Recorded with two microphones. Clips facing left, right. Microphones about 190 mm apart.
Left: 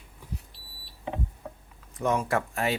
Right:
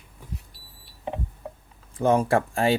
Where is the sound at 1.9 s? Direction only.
30° right (ahead or behind).